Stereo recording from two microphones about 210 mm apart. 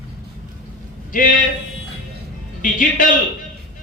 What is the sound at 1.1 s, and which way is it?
Speech, 40° left (ahead or behind).